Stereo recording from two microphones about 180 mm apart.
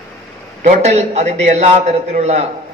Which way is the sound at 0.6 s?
40° right (ahead or behind).